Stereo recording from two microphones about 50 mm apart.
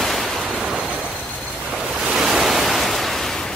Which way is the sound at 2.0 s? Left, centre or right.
Centre.